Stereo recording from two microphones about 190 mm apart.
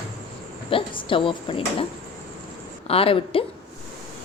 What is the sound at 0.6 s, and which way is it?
A woman's voice, 25° left (ahead or behind).